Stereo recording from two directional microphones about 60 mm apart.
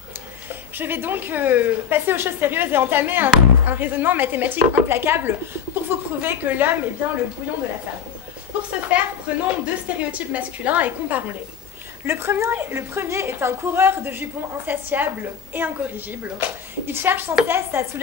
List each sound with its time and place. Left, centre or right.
0.5 s speech: right
8.9 s a woman's voice: right
12.1 s a woman's voice: right